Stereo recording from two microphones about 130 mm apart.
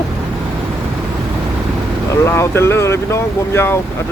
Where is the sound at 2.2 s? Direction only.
20° left (ahead or behind).